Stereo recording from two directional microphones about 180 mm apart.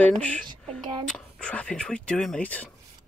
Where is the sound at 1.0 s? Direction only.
5° left (ahead or behind).